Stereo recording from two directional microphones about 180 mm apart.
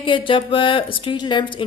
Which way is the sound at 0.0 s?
30° left (ahead or behind).